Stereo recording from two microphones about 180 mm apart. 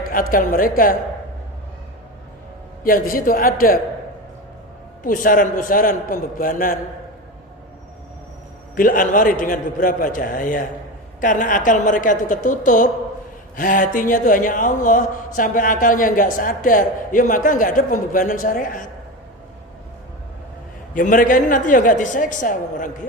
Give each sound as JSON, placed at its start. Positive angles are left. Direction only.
{"t": 0.1, "sound": "a man's voice", "side_deg": 50}
{"t": 2.8, "sound": "a man's voice", "side_deg": 50}
{"t": 5.0, "sound": "a man's voice", "side_deg": 50}
{"t": 8.7, "sound": "a man's voice", "side_deg": 50}
{"t": 20.9, "sound": "a man's voice", "side_deg": 45}